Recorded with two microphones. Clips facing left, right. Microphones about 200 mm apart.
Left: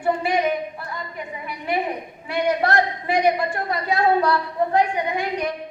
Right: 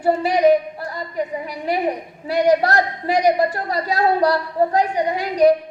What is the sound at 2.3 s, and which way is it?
A woman's voice, 40° right (ahead or behind).